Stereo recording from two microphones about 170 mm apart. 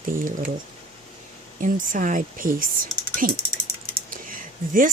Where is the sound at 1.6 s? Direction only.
50° right (ahead or behind).